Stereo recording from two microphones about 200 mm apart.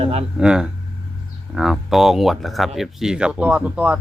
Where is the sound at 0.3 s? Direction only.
5° right (ahead or behind).